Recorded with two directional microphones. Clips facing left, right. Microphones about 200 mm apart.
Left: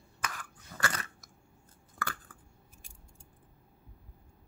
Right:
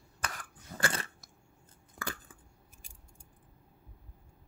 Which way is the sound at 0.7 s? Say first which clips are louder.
Right 2 dB; 25° right (ahead or behind).